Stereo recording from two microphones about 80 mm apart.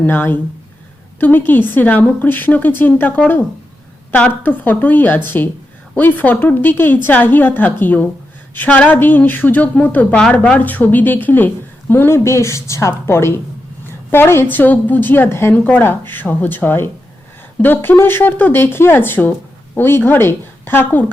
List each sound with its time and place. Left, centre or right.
0.0 s a woman's voice: left